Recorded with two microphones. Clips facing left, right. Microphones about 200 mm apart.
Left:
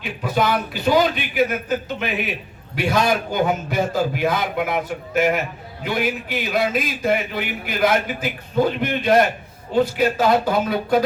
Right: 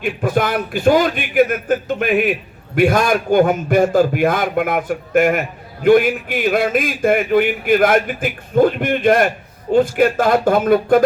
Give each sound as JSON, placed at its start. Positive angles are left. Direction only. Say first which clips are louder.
{"t": 0.0, "sound": "a man's voice", "louder": "right 4 dB", "side_deg": -50}